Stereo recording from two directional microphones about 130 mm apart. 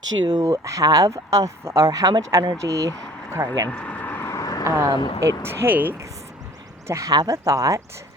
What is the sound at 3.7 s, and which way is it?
Vehicle, 10° left (ahead or behind).